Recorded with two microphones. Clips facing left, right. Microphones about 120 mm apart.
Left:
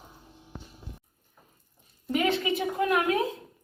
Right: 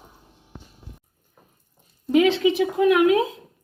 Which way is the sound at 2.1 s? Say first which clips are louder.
Right 8 dB; 85° right.